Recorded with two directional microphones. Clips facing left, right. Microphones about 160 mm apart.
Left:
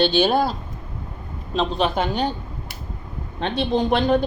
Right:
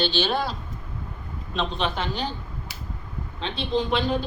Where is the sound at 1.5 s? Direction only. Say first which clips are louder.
Left 6 dB; 40° left (ahead or behind).